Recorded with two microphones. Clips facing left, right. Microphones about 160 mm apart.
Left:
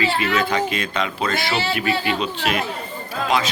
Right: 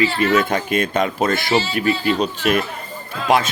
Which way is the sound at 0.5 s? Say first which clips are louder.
Right 3 dB; 50° right (ahead or behind).